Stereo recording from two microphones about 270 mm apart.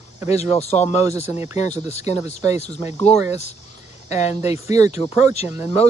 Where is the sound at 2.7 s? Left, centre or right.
Centre.